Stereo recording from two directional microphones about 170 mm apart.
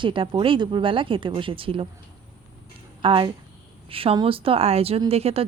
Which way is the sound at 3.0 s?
30° right (ahead or behind).